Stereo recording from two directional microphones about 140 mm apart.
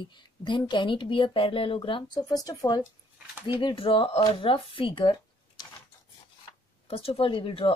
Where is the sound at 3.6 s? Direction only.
40° left (ahead or behind).